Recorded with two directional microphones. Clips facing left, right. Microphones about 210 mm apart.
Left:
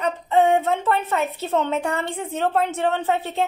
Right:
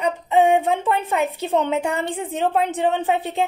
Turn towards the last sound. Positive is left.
turn(degrees=-15)  # may be behind; listen again after turning